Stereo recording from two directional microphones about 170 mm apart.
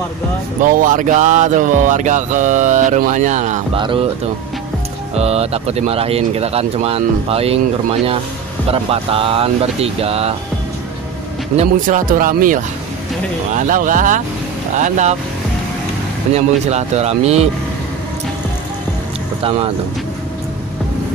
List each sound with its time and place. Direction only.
0.6 s a sound: 50° right (ahead or behind)
3.7 s speech: 30° right (ahead or behind)
5.1 s speech: 35° right (ahead or behind)
8.6 s speech: 35° right (ahead or behind)
11.5 s a sound: 50° right (ahead or behind)
16.3 s speech: 40° right (ahead or behind)